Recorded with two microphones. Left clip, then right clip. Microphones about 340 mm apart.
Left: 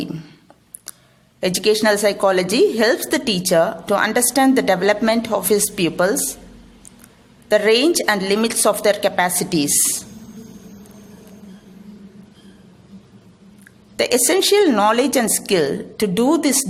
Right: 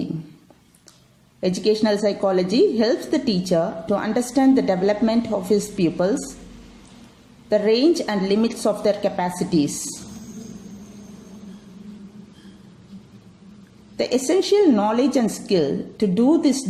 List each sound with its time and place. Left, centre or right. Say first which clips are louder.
1.4 s a woman's voice: left 3 dB; left
7.5 s a woman's voice: left 3 dB; left
13.9 s a woman's voice: left 3 dB; left